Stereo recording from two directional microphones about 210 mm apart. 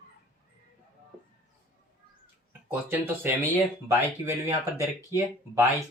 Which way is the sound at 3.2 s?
10° right (ahead or behind).